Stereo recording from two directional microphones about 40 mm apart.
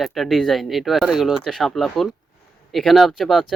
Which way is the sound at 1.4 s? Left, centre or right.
Centre.